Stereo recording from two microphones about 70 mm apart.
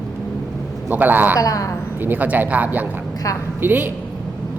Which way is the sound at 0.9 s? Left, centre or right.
Right.